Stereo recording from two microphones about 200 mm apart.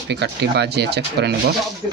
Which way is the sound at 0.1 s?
60° right (ahead or behind).